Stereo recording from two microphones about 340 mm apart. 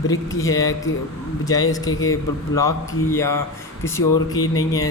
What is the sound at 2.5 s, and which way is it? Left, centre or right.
Speech, centre.